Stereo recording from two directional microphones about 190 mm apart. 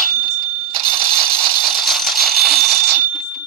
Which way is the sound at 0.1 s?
45° right (ahead or behind).